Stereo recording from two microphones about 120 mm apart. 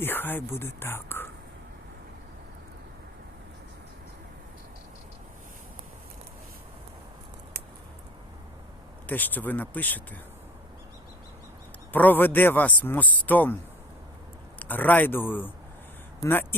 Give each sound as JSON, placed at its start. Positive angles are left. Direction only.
{"t": 0.0, "sound": "a man's voice", "side_deg": 15}
{"t": 9.0, "sound": "a man's voice", "side_deg": 15}
{"t": 11.9, "sound": "a man's voice", "side_deg": 15}
{"t": 14.6, "sound": "a man's voice", "side_deg": 15}